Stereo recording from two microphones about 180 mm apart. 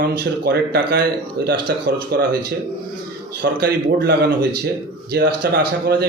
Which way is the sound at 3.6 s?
65° right (ahead or behind).